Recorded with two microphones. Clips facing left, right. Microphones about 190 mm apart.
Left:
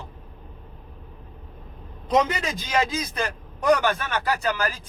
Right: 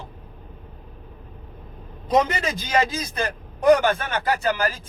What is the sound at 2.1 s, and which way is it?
A man's voice, 35° right (ahead or behind).